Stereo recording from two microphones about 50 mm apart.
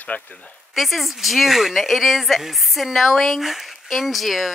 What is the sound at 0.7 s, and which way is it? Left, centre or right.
Speech, centre.